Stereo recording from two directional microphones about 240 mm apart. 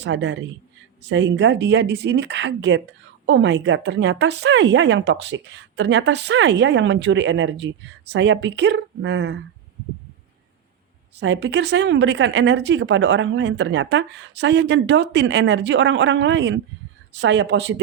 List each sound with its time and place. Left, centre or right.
0.0 s speech: right
11.2 s speech: right